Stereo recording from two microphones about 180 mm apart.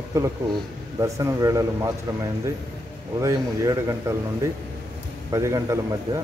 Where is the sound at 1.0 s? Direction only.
20° right (ahead or behind).